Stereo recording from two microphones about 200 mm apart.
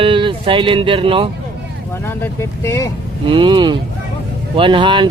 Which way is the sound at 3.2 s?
25° right (ahead or behind).